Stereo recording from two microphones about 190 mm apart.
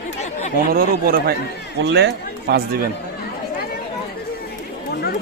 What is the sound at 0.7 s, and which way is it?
Speech, 50° right (ahead or behind).